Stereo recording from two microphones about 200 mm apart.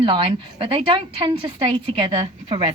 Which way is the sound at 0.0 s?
25° right (ahead or behind).